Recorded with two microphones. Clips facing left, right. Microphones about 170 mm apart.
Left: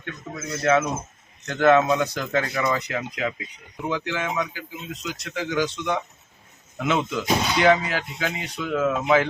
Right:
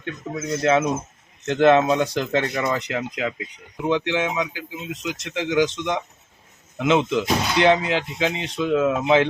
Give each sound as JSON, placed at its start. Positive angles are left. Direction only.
{"t": 0.0, "sound": "speech", "side_deg": -25}